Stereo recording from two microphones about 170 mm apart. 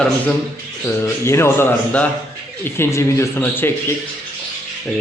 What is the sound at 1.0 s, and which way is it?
A man's voice, 15° left (ahead or behind).